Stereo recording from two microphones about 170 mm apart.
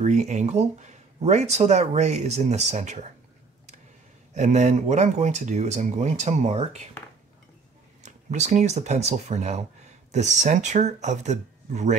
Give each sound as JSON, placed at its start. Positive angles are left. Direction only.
{"t": 0.0, "sound": "speech", "side_deg": -45}
{"t": 4.3, "sound": "speech", "side_deg": -45}
{"t": 8.0, "sound": "speech", "side_deg": -45}